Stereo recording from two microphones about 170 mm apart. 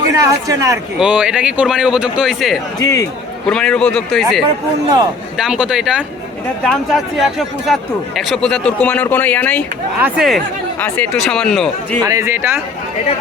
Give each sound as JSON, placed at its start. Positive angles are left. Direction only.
{"t": 0.1, "sound": "speech", "side_deg": -20}
{"t": 0.9, "sound": "speech", "side_deg": -5}
{"t": 10.0, "sound": "speech", "side_deg": 0}
{"t": 10.8, "sound": "speech", "side_deg": 10}
{"t": 12.0, "sound": "speech", "side_deg": -15}